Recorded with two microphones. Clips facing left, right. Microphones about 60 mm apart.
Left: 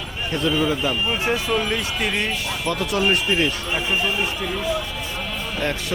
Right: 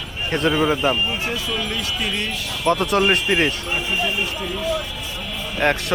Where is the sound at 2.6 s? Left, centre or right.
Right.